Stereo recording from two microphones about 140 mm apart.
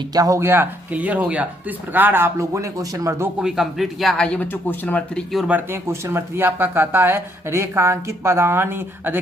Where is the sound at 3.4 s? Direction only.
Centre (ahead or behind).